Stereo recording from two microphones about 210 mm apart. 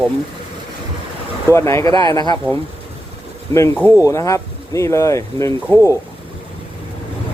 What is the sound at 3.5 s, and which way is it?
Speech, 15° left (ahead or behind).